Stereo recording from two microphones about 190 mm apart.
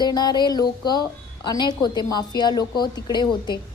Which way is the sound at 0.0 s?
20° left (ahead or behind).